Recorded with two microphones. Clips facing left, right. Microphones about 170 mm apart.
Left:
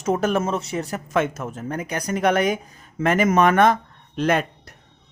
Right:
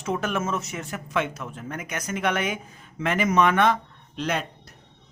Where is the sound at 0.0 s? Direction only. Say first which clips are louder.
Left 6 dB; 40° left (ahead or behind).